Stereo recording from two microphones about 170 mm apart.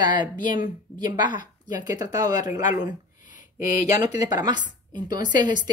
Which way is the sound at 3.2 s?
50° left (ahead or behind).